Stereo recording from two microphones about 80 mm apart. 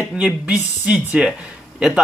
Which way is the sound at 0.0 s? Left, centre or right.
Centre.